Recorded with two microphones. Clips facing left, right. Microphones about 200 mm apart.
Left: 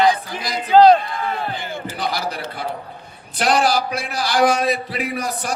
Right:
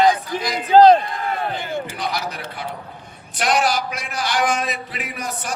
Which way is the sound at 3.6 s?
35° left (ahead or behind).